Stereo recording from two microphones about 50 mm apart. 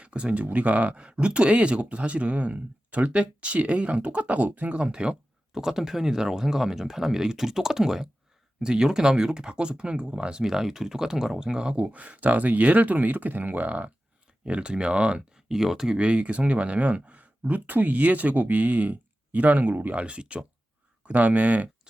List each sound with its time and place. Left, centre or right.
0.0 s speech: right
10.4 s speech: centre
16.0 s speech: right
20.0 s speech: right